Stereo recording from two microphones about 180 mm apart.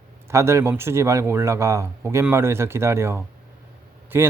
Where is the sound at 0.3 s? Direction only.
15° right (ahead or behind).